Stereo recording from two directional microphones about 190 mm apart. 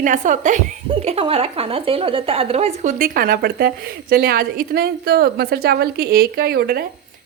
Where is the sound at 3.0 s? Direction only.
50° right (ahead or behind).